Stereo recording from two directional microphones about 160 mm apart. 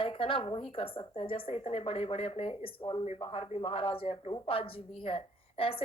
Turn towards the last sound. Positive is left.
turn(degrees=35)  # may be behind; listen again after turning